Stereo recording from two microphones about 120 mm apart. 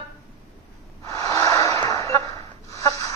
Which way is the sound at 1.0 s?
25° left (ahead or behind).